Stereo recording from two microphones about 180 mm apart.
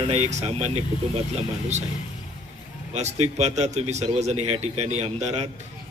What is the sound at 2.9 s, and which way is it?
A man's voice, 40° right (ahead or behind).